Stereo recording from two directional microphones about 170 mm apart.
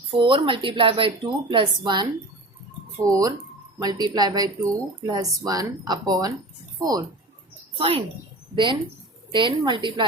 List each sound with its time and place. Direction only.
0.2 s speech: 30° right (ahead or behind)
7.8 s speech: 35° right (ahead or behind)